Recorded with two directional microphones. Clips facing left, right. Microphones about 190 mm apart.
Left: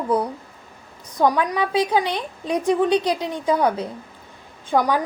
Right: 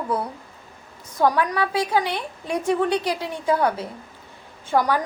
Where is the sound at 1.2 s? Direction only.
15° left (ahead or behind).